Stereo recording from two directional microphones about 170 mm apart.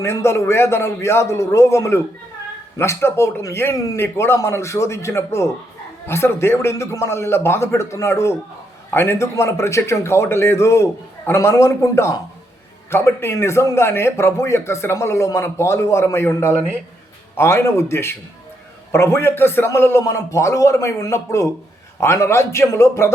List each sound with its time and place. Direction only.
0.0 s a man's voice: 15° left (ahead or behind)
16.5 s speech: 10° right (ahead or behind)
17.3 s a man's voice: 15° left (ahead or behind)